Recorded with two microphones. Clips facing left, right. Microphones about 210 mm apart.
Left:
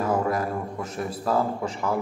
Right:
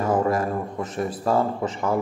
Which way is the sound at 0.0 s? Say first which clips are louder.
Right 3 dB; centre (ahead or behind).